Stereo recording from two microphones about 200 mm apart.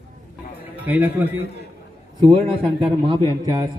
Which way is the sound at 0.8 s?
10° right (ahead or behind).